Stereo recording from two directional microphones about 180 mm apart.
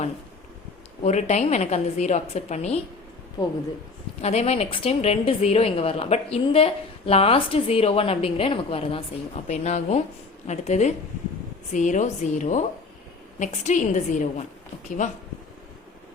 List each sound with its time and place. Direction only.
1.0 s a woman's voice: 40° left (ahead or behind)
4.2 s a woman's voice: 35° left (ahead or behind)